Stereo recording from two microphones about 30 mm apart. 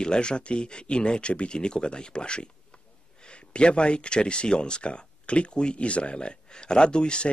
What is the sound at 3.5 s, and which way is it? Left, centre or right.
Speech, left.